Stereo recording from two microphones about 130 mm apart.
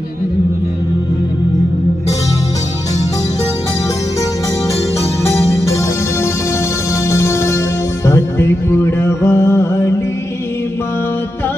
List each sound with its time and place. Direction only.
7.1 s music: 20° left (ahead or behind)